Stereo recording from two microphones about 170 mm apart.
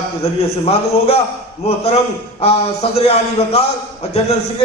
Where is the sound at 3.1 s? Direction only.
35° left (ahead or behind).